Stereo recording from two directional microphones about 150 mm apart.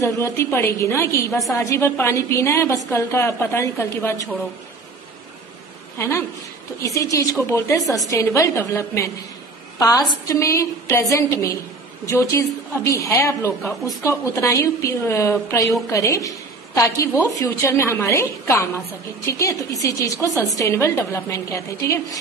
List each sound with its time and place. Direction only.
0.0 s a woman's voice: 15° left (ahead or behind)
5.9 s a woman's voice: 20° left (ahead or behind)